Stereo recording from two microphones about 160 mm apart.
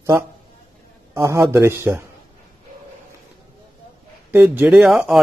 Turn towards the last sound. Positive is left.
turn(degrees=0)  # may be behind; listen again after turning